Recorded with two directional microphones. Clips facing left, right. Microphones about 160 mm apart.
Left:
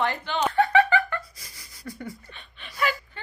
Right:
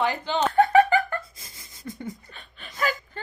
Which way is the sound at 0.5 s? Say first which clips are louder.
Right 3 dB; 40° right (ahead or behind).